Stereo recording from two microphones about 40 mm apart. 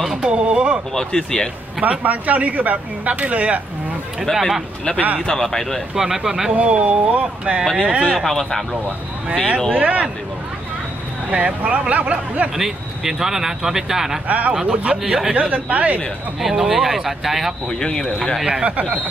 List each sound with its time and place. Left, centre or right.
0.1 s a sound: right
0.9 s speech: centre
1.8 s speech: right
4.3 s speech: centre
5.9 s speech: centre
6.5 s speech: right
8.1 s speech: centre
9.8 s speech: right
11.2 s speech: right
12.5 s speech: centre
14.2 s speech: right
16.3 s speech: centre
17.6 s speech: centre